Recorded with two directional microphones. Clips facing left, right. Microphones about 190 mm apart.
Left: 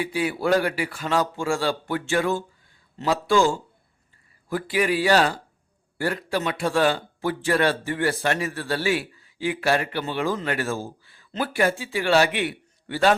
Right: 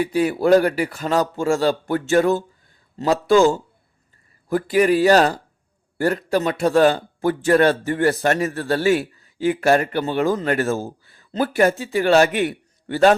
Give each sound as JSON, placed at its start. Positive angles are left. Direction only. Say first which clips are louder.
{"t": 0.0, "sound": "a man's voice", "louder": "right 6 dB", "side_deg": -40}